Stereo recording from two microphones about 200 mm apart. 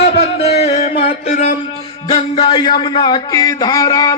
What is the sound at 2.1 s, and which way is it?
A man's voice, 25° left (ahead or behind).